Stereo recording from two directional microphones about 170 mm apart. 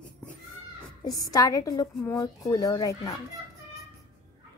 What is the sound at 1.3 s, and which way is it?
Speech, 20° left (ahead or behind).